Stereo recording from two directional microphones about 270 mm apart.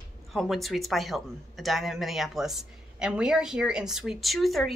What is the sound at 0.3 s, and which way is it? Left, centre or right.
A man's voice, centre.